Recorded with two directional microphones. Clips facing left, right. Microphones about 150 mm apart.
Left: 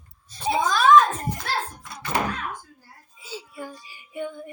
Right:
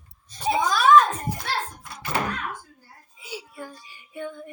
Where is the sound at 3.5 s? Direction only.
5° left (ahead or behind).